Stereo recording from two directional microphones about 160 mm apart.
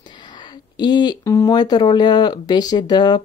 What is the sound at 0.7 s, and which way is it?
Speech, 25° left (ahead or behind).